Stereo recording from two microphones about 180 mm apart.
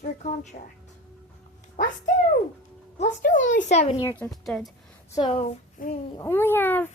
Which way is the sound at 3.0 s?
45° left (ahead or behind).